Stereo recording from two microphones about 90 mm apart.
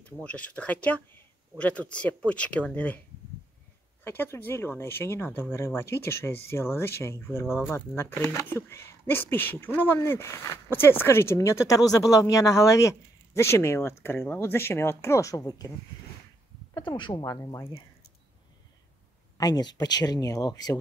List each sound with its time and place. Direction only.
0.0 s speech: 15° left (ahead or behind)
4.0 s speech: 25° left (ahead or behind); by 15.7 s 45° left (ahead or behind)
16.7 s speech: 65° left (ahead or behind)
17.2 s speech: 40° left (ahead or behind)
19.3 s speech: 45° left (ahead or behind)